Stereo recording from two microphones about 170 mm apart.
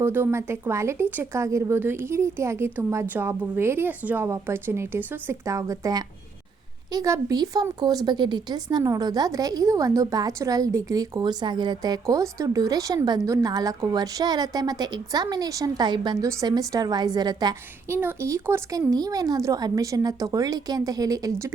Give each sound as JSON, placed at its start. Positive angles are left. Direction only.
{"t": 0.0, "sound": "a woman's voice", "side_deg": -15}